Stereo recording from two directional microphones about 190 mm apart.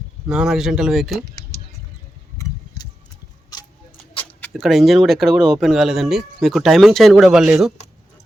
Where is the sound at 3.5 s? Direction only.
30° left (ahead or behind).